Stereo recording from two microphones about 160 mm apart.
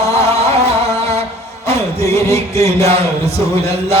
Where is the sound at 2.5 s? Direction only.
40° right (ahead or behind).